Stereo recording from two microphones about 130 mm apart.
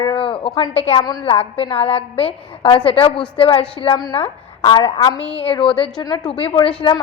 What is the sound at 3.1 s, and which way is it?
Speech, 10° left (ahead or behind).